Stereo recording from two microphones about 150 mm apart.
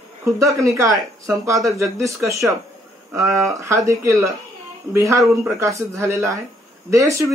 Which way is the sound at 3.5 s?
20° right (ahead or behind).